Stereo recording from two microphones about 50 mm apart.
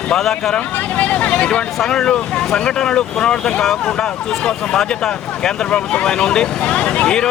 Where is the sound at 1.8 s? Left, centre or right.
Centre.